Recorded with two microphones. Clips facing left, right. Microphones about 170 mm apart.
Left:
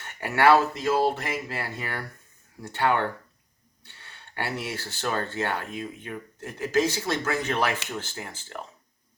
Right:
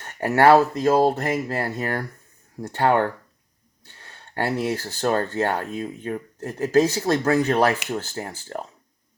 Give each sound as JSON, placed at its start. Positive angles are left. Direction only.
{"t": 0.0, "sound": "speech", "side_deg": -40}